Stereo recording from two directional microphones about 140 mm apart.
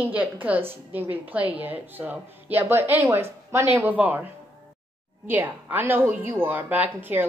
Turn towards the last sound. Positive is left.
turn(degrees=-15)  # may be behind; listen again after turning